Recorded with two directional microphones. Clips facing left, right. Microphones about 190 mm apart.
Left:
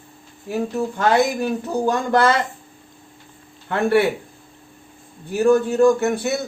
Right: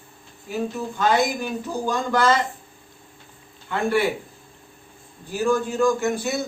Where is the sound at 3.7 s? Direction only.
65° left (ahead or behind).